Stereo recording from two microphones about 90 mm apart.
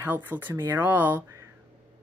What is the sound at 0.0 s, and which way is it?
Speech, 20° right (ahead or behind).